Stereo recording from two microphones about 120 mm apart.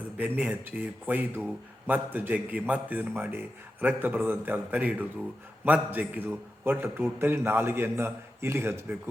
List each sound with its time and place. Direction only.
0.2 s a man's voice: 10° right (ahead or behind)